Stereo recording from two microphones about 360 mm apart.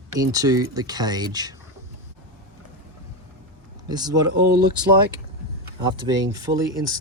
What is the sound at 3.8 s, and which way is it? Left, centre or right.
Speech, centre.